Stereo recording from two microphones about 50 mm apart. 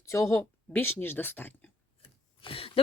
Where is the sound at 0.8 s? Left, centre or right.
Left.